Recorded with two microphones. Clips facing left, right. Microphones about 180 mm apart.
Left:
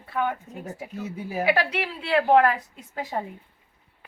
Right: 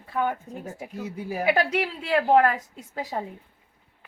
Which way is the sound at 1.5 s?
45° right (ahead or behind).